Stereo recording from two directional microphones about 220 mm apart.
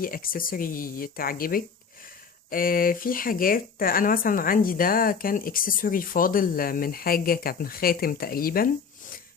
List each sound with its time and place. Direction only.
0.0 s speech: 40° left (ahead or behind)